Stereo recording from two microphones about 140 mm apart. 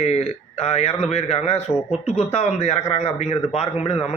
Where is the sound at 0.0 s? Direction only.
50° left (ahead or behind).